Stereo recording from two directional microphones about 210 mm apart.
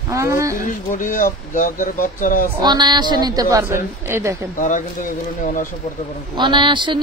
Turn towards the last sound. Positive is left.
turn(degrees=-20)  # may be behind; listen again after turning